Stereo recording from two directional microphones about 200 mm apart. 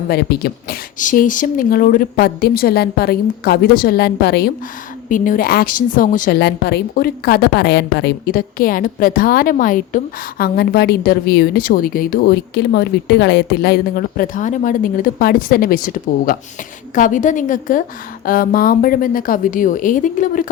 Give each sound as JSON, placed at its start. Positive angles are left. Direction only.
{"t": 0.1, "sound": "speech", "side_deg": 55}
{"t": 0.9, "sound": "a woman's voice", "side_deg": 40}
{"t": 5.0, "sound": "a woman's voice", "side_deg": 40}